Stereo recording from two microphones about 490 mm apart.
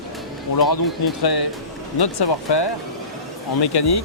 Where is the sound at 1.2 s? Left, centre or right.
Left.